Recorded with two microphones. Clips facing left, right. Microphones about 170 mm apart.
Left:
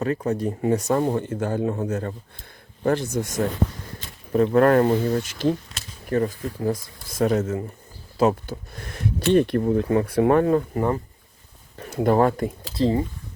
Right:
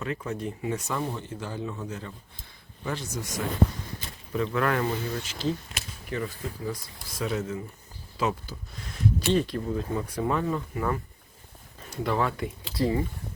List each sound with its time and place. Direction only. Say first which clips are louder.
0.0 s speech: left 8 dB; 40° left (ahead or behind); by 10.6 s 60° left (ahead or behind)
10.8 s speech: left 6 dB; 35° left (ahead or behind)
12.0 s speech: left 9 dB; 45° left (ahead or behind)
12.7 s speech: left 4 dB; 25° left (ahead or behind)